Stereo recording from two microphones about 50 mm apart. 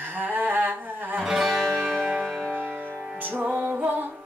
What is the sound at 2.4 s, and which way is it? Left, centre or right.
Music, right.